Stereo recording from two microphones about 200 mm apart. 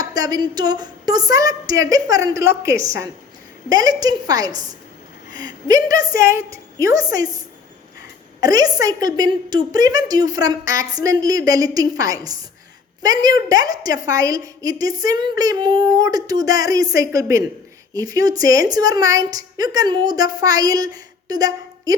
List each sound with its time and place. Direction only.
0.0 s a woman's voice: 20° right (ahead or behind)